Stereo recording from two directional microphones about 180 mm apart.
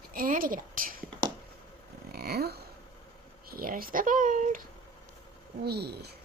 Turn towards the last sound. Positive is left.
turn(degrees=-65)  # may be behind; listen again after turning